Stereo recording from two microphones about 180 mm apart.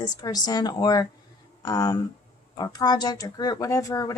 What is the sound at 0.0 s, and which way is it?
Speech, 20° left (ahead or behind).